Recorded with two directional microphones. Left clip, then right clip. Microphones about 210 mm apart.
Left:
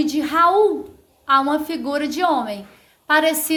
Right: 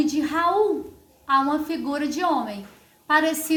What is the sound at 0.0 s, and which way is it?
A woman's voice, 35° left (ahead or behind).